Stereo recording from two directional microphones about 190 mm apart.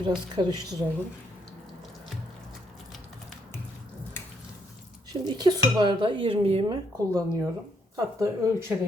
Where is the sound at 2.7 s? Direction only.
Centre (ahead or behind).